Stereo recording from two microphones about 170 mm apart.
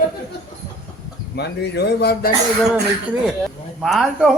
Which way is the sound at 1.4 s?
75° left (ahead or behind).